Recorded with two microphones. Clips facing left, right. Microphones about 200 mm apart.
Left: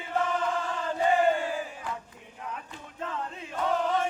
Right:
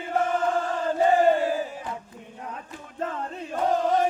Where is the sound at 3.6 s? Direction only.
40° right (ahead or behind).